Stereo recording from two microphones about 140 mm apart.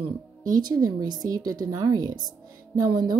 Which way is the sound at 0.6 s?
30° right (ahead or behind).